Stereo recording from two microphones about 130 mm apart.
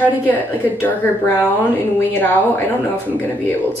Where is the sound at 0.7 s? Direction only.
15° left (ahead or behind).